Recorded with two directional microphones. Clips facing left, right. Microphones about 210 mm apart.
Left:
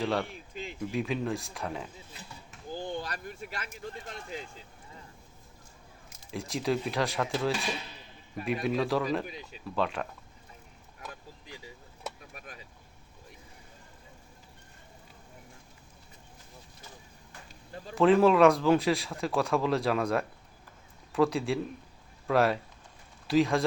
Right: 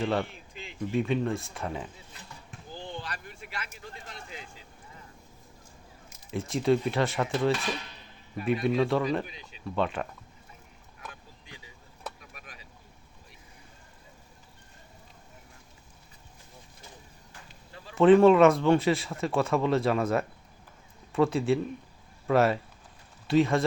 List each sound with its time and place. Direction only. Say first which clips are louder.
0.0 s speech: right 2 dB; centre (ahead or behind)
2.8 s a sound: left 3 dB; 45° left (ahead or behind)
6.3 s speech: right 5 dB; centre (ahead or behind)
17.9 s speech: right 4 dB; centre (ahead or behind)